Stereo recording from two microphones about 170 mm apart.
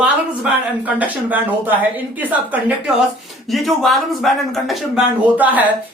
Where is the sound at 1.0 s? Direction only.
10° right (ahead or behind).